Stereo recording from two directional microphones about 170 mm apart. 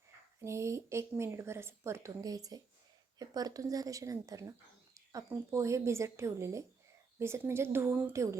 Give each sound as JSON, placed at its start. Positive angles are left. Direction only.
{"t": 0.4, "sound": "speech", "side_deg": -15}